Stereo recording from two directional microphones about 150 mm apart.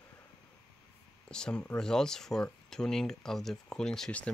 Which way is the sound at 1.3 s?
5° left (ahead or behind).